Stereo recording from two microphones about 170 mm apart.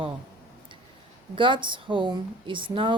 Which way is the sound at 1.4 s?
30° right (ahead or behind).